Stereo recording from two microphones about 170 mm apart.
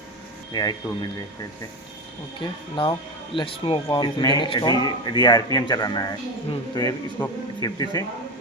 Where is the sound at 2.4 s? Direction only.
30° left (ahead or behind).